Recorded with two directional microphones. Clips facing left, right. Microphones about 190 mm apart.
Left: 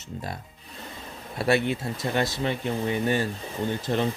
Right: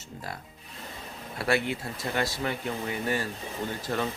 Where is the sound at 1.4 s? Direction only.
25° left (ahead or behind).